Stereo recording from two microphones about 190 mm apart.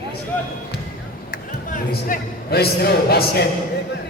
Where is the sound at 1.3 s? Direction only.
45° left (ahead or behind).